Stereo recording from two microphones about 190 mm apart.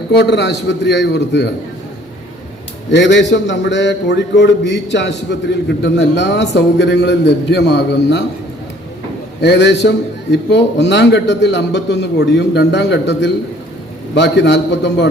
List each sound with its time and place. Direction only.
0.1 s a man's voice: 65° left (ahead or behind)
2.9 s a man's voice: 70° left (ahead or behind)
9.4 s a man's voice: 65° left (ahead or behind)